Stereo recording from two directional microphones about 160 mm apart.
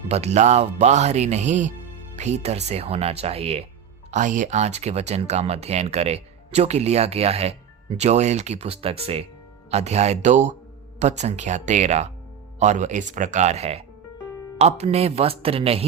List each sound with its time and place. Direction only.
0.1 s speech: 40° right (ahead or behind)
4.1 s speech: 50° right (ahead or behind)